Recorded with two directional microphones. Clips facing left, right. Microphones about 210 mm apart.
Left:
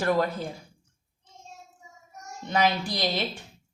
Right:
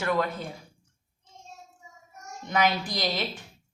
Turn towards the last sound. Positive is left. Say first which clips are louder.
# left 1 dB
turn(degrees=30)  # may be behind; listen again after turning